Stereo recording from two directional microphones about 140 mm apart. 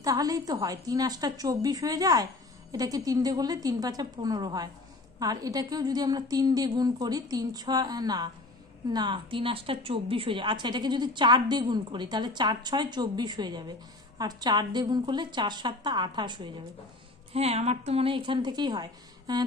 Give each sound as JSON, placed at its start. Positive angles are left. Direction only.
{"t": 0.0, "sound": "a woman's voice", "side_deg": -25}
{"t": 17.3, "sound": "speech", "side_deg": -45}